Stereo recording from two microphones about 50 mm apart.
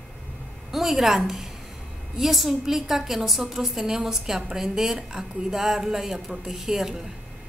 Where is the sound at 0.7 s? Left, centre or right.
Centre.